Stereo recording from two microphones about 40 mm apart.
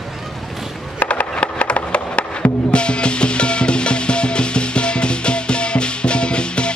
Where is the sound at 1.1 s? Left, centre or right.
Left.